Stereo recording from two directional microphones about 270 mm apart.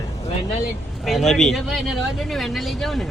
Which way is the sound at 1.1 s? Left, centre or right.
Centre.